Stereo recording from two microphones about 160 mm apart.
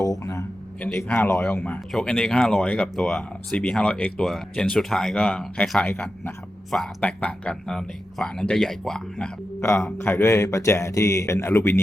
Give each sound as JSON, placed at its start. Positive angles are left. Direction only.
{"t": 0.0, "sound": "a sound", "side_deg": 20}
{"t": 0.8, "sound": "a man's voice", "side_deg": 10}
{"t": 9.6, "sound": "a man's voice", "side_deg": 15}